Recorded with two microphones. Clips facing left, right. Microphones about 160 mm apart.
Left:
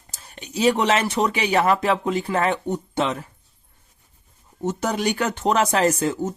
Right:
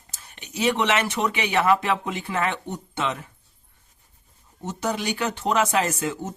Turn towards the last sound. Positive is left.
turn(degrees=40)  # may be behind; listen again after turning